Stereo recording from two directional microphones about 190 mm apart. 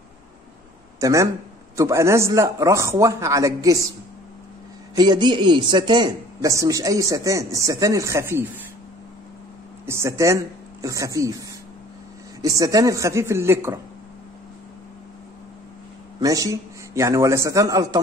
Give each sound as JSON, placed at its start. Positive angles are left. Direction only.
{"t": 1.0, "sound": "speech", "side_deg": -15}
{"t": 4.9, "sound": "speech", "side_deg": -25}
{"t": 9.8, "sound": "speech", "side_deg": -15}
{"t": 16.2, "sound": "speech", "side_deg": -20}